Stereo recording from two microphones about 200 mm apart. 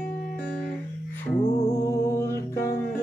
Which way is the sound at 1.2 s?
10° left (ahead or behind).